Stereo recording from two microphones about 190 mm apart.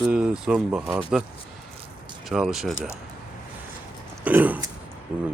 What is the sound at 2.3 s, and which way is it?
Speech, centre (ahead or behind).